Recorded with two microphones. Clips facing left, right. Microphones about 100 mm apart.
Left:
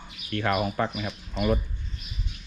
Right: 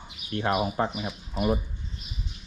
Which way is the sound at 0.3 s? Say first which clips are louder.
Even; 20° right (ahead or behind).